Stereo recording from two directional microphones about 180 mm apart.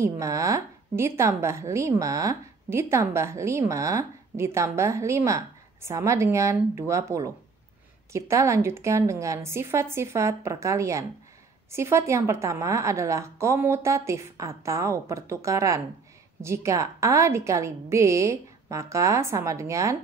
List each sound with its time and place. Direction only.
0.0 s a woman's voice: 15° right (ahead or behind)